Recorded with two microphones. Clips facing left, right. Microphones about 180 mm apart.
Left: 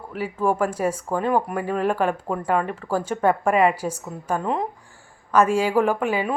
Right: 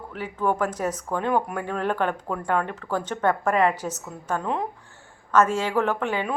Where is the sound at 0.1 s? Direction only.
10° left (ahead or behind).